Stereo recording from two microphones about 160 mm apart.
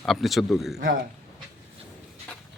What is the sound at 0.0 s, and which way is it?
Speech, centre (ahead or behind).